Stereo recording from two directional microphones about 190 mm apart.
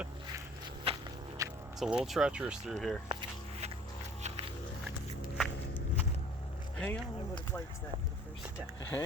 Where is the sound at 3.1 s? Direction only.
30° right (ahead or behind).